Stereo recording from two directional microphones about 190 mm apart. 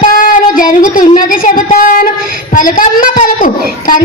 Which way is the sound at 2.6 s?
45° left (ahead or behind).